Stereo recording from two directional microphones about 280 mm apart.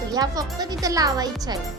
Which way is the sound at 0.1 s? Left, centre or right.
Centre.